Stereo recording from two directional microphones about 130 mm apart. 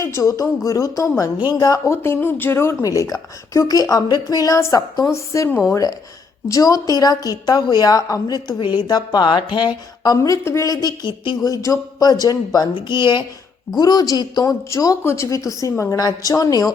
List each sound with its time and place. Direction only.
0.0 s a woman's voice: 20° left (ahead or behind)